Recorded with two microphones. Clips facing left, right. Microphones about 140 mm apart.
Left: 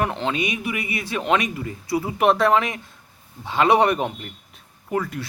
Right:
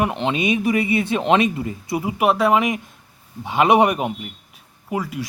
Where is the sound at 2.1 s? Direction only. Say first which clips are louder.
Right 1 dB; 10° right (ahead or behind).